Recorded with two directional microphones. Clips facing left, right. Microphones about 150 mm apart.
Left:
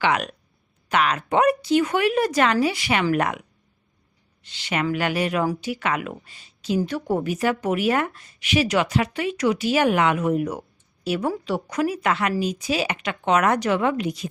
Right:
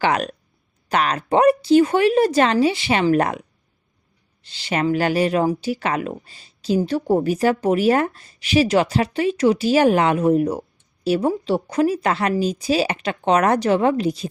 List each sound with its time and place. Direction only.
0.0 s speech: 35° right (ahead or behind)
4.4 s speech: 30° right (ahead or behind)